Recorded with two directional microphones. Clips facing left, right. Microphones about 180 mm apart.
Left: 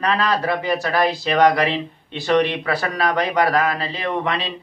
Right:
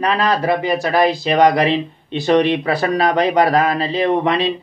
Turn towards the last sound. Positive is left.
turn(degrees=-20)  # may be behind; listen again after turning